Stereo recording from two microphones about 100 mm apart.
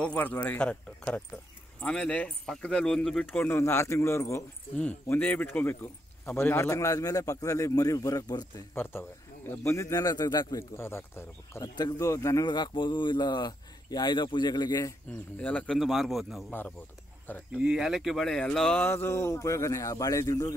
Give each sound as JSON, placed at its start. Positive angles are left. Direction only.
{"t": 0.0, "sound": "speech", "side_deg": 15}
{"t": 3.3, "sound": "speech", "side_deg": 20}
{"t": 5.0, "sound": "speech", "side_deg": 20}
{"t": 9.5, "sound": "speech", "side_deg": 25}
{"t": 10.8, "sound": "speech", "side_deg": 25}
{"t": 11.6, "sound": "speech", "side_deg": 40}
{"t": 12.4, "sound": "speech", "side_deg": 50}
{"t": 15.3, "sound": "speech", "side_deg": 15}
{"t": 15.8, "sound": "speech", "side_deg": 0}
{"t": 16.4, "sound": "speech", "side_deg": 15}
{"t": 17.6, "sound": "speech", "side_deg": -5}
{"t": 18.8, "sound": "speech", "side_deg": 25}